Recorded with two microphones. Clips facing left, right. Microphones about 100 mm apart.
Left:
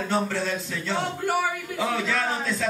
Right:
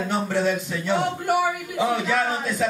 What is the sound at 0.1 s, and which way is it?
A man's voice, 15° right (ahead or behind).